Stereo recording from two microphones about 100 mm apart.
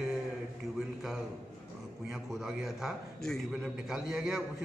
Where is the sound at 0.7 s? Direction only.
5° right (ahead or behind).